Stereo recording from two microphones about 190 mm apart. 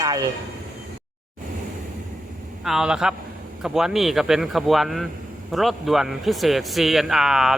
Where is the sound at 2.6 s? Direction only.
5° right (ahead or behind).